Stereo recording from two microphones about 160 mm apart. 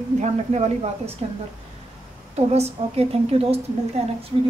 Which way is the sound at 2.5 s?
40° right (ahead or behind).